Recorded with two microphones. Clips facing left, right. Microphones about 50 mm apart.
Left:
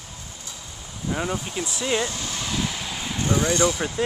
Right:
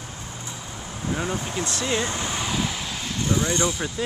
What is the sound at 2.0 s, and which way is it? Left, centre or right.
Speech, right.